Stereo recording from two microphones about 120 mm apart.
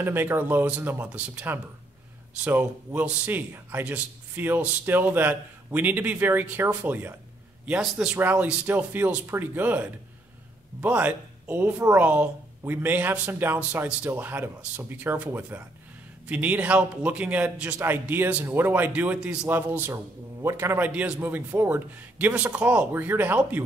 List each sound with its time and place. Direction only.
0.0 s speech: 20° right (ahead or behind)